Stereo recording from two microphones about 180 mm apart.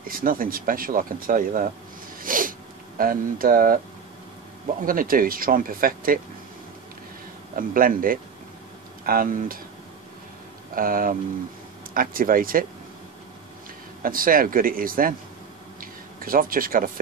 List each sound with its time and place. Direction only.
0.0 s speech: 50° right (ahead or behind)
2.2 s a sound: 50° right (ahead or behind)
3.0 s speech: 50° right (ahead or behind)
4.8 s speech: 50° right (ahead or behind)
7.5 s speech: 50° right (ahead or behind)
10.7 s speech: 50° right (ahead or behind)
14.0 s speech: 50° right (ahead or behind)